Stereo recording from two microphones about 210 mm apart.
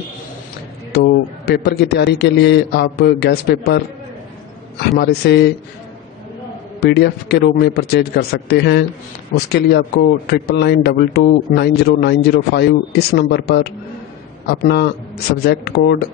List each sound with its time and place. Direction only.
0.9 s speech: 50° left (ahead or behind)
6.8 s speech: 50° left (ahead or behind)
14.6 s speech: 50° left (ahead or behind)